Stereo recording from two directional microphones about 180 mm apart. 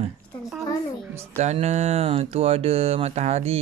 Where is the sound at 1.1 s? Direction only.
35° right (ahead or behind).